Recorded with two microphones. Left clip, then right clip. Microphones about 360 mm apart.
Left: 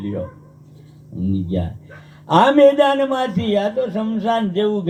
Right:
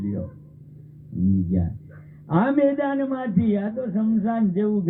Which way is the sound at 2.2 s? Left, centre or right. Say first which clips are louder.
Left 9 dB; left.